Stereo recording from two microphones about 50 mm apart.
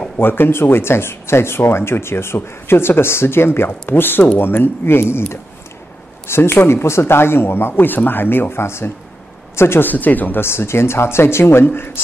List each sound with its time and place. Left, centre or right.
0.2 s speech: left
6.2 s speech: left
9.8 s speech: left
10.4 s speech: left